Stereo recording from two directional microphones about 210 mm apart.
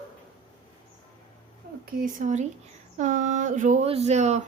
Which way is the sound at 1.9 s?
40° right (ahead or behind).